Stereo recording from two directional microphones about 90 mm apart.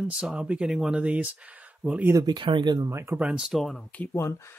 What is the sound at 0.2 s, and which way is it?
Speech, 10° right (ahead or behind).